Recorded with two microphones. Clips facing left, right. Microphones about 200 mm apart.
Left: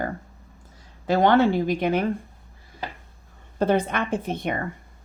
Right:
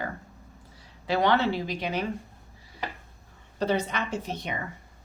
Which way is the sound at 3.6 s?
55° left (ahead or behind).